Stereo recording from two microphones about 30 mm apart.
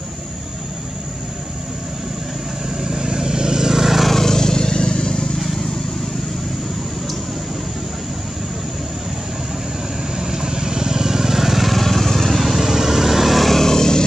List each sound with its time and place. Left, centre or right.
2.8 s vehicle: right
4.1 s vehicle: centre
10.1 s vehicle: centre
12.4 s vehicle: centre
13.5 s vehicle: centre